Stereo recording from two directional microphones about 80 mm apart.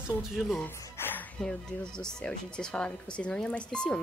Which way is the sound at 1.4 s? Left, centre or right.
Centre.